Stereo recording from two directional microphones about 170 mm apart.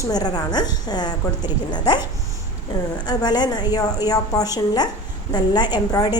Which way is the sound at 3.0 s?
25° left (ahead or behind).